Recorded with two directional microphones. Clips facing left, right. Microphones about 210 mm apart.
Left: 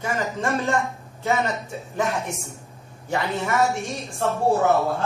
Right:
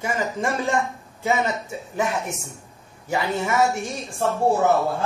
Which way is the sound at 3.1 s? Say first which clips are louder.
Right 1 dB; centre (ahead or behind).